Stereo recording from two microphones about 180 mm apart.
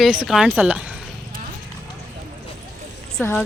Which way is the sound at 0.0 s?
5° right (ahead or behind).